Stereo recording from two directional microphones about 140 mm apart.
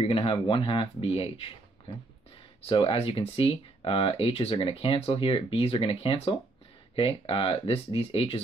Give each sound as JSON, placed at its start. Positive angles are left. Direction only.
{"t": 0.0, "sound": "speech", "side_deg": 40}
{"t": 2.6, "sound": "speech", "side_deg": 40}